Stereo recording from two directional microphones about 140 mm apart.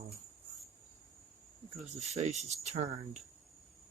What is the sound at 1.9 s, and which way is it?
Speech, 55° right (ahead or behind).